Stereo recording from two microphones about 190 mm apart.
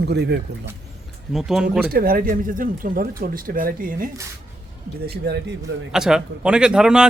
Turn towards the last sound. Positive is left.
turn(degrees=-5)  # may be behind; listen again after turning